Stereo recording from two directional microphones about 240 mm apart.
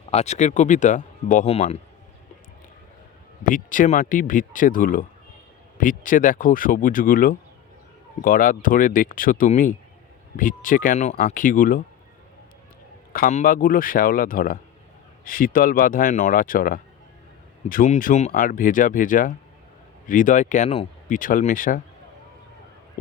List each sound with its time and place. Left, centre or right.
0.1 s speech: left
3.5 s speech: left
13.1 s speech: left